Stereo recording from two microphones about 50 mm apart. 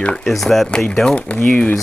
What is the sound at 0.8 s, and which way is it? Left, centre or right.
Speech, left.